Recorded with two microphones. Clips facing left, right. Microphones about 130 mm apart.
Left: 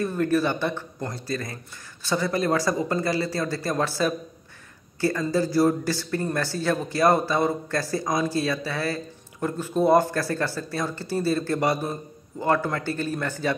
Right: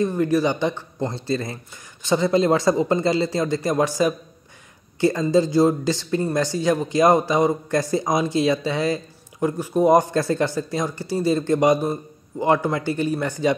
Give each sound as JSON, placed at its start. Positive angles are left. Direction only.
{"t": 0.0, "sound": "speech", "side_deg": -15}
{"t": 5.3, "sound": "a man's voice", "side_deg": -20}